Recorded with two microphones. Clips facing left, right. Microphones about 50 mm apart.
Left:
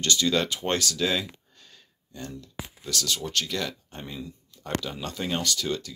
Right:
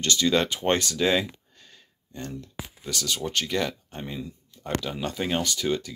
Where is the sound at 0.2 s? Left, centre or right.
Centre.